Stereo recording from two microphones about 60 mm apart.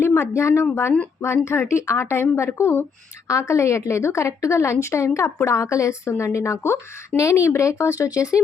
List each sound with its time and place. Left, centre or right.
0.0 s speech: left
3.2 s a woman's voice: left